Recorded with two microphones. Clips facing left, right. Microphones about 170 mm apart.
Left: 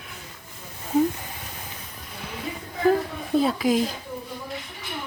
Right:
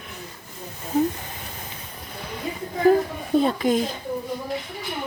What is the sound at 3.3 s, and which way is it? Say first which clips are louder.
Speech: right 1 dB; 5° left (ahead or behind).